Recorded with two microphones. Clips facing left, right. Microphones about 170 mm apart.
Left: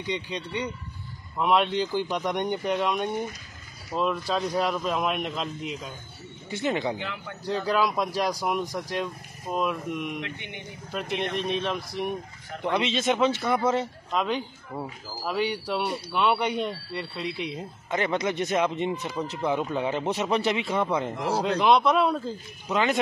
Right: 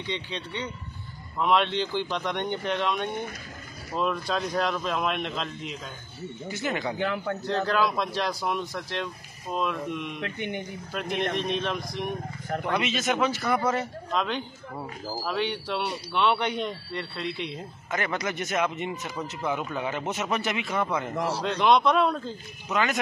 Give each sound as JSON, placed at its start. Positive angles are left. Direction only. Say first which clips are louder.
{"t": 1.4, "sound": "speech", "louder": "left 1 dB", "side_deg": 5}
{"t": 6.5, "sound": "speech", "louder": "left 3 dB", "side_deg": 25}
{"t": 7.0, "sound": "a man's voice", "louder": "right 8 dB", "side_deg": -50}
{"t": 7.4, "sound": "speech", "louder": "left 1 dB", "side_deg": 10}
{"t": 10.2, "sound": "a man's voice", "louder": "right 6 dB", "side_deg": -50}
{"t": 10.9, "sound": "speech", "louder": "even", "side_deg": 0}
{"t": 12.6, "sound": "speech", "louder": "left 3 dB", "side_deg": 25}
{"t": 14.1, "sound": "speech", "louder": "left 2 dB", "side_deg": 5}
{"t": 17.9, "sound": "speech", "louder": "left 4 dB", "side_deg": 25}
{"t": 21.5, "sound": "speech", "louder": "even", "side_deg": 5}
{"t": 22.7, "sound": "speech", "louder": "left 2 dB", "side_deg": 25}